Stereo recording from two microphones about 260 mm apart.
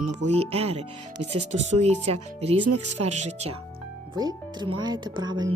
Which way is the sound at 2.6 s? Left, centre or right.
Right.